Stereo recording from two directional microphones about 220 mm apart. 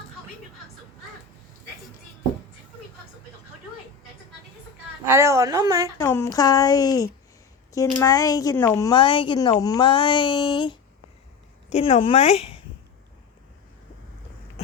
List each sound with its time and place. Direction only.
5.0 s speech: 10° right (ahead or behind)
6.0 s a woman's voice: 10° left (ahead or behind); by 12.6 s 25° left (ahead or behind)